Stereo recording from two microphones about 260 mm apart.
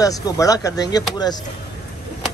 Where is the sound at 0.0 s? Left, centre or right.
Centre.